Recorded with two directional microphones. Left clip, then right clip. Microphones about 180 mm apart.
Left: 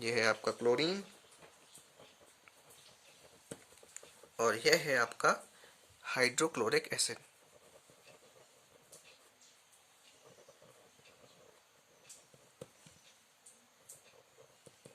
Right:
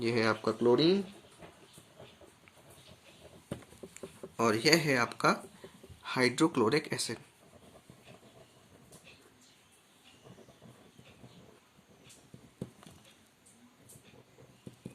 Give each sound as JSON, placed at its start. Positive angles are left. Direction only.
{"t": 0.0, "sound": "speech", "side_deg": 50}
{"t": 3.9, "sound": "speech", "side_deg": 35}